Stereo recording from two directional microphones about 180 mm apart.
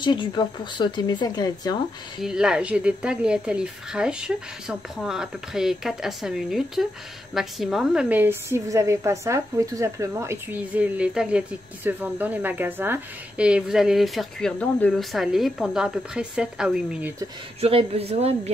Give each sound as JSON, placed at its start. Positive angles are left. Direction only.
{"t": 0.0, "sound": "speech", "side_deg": 25}
{"t": 2.2, "sound": "a woman's voice", "side_deg": -5}
{"t": 17.6, "sound": "a woman's voice", "side_deg": -35}